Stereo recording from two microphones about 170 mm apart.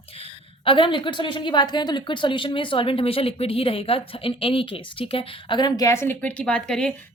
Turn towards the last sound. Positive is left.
turn(degrees=5)  # may be behind; listen again after turning